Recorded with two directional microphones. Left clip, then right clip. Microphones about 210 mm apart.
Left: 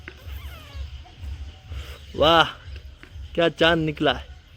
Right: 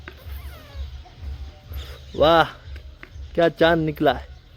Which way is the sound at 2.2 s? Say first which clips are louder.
Right 1 dB; 10° right (ahead or behind).